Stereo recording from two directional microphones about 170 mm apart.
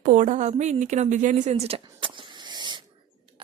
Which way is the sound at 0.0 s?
45° right (ahead or behind).